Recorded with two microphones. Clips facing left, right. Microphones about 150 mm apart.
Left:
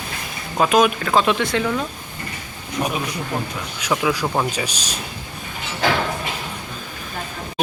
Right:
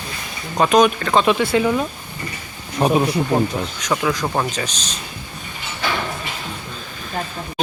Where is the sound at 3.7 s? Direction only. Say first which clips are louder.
Left 2 dB; 5° left (ahead or behind).